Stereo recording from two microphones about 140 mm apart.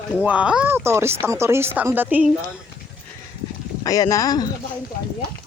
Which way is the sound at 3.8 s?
25° left (ahead or behind).